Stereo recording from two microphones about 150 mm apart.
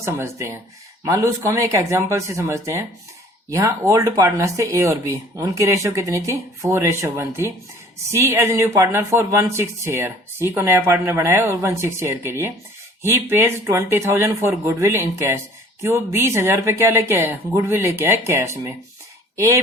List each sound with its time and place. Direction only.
0.0 s speech: 15° right (ahead or behind)